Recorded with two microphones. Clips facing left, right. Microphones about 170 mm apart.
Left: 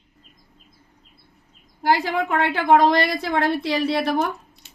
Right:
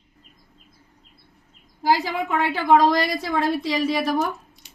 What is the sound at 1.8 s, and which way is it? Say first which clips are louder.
A woman's voice: left 1 dB; 60° left (ahead or behind).